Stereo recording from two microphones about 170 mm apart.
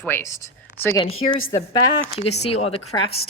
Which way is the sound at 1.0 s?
35° left (ahead or behind).